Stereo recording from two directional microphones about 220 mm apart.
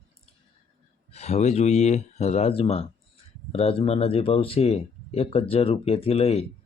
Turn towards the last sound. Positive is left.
turn(degrees=25)  # may be behind; listen again after turning